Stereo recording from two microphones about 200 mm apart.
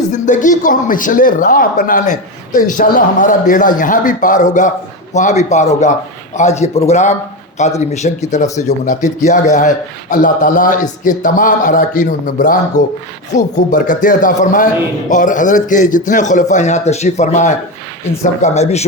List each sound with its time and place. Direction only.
0.1 s a man's voice: 40° left (ahead or behind)